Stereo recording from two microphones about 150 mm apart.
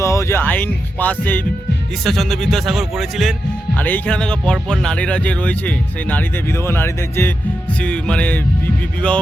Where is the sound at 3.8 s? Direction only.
10° left (ahead or behind).